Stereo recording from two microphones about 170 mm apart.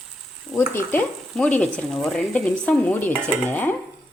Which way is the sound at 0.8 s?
10° left (ahead or behind).